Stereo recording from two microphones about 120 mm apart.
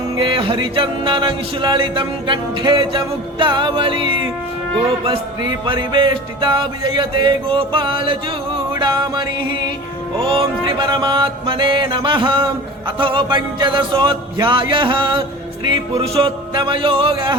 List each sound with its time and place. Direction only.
0.2 s music: 45° right (ahead or behind)
10.2 s mantra: 45° right (ahead or behind)
13.0 s music: 45° right (ahead or behind)